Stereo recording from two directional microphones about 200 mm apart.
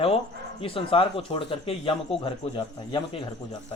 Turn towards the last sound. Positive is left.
turn(degrees=25)  # may be behind; listen again after turning